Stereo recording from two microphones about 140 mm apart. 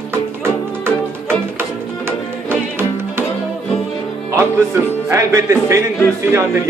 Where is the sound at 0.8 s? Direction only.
15° right (ahead or behind).